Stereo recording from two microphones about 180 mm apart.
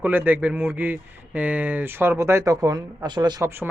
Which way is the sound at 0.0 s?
10° right (ahead or behind).